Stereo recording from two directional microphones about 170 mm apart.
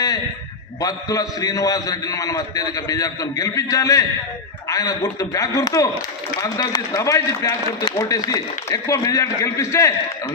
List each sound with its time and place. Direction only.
0.8 s a man's voice: 20° left (ahead or behind)